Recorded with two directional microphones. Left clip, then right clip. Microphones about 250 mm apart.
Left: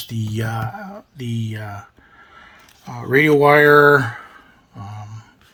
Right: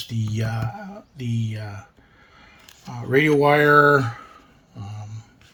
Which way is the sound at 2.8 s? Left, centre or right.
Centre.